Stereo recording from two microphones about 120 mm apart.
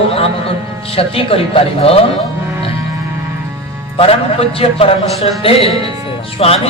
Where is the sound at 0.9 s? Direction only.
50° left (ahead or behind).